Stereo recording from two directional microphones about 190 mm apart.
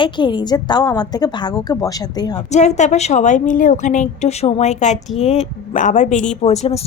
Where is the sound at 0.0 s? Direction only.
25° left (ahead or behind).